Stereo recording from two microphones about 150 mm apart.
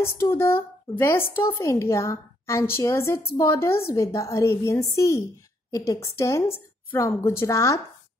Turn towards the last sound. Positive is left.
turn(degrees=20)  # may be behind; listen again after turning